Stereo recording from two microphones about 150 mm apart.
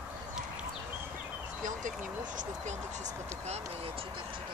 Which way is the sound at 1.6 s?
60° right (ahead or behind).